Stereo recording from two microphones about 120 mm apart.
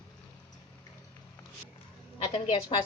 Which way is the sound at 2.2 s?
50° left (ahead or behind).